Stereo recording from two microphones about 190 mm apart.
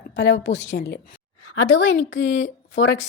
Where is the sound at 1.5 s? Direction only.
90° left.